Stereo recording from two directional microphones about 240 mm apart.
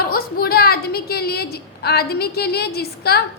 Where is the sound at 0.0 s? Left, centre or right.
Left.